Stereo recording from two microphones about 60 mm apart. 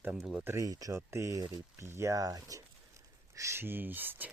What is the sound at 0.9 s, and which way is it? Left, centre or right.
Speech, right.